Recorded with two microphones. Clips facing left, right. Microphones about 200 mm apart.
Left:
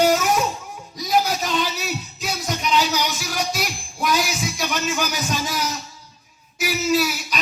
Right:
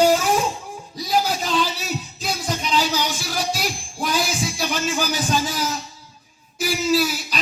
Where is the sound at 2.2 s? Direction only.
35° right (ahead or behind).